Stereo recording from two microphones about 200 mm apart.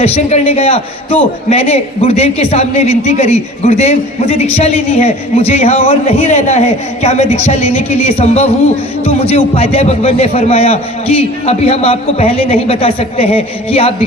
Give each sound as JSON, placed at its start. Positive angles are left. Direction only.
{"t": 0.0, "sound": "a man's voice", "side_deg": 30}